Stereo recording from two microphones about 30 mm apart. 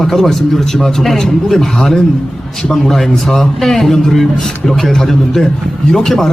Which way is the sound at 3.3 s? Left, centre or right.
Centre.